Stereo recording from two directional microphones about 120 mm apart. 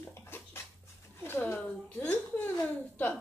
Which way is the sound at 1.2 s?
20° left (ahead or behind).